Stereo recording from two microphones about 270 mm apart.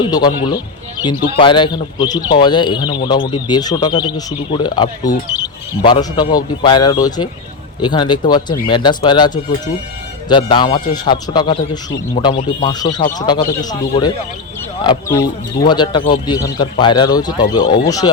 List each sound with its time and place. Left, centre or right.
0.0 s speech: centre